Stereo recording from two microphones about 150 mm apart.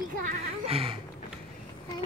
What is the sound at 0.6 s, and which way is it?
Speech, 40° right (ahead or behind).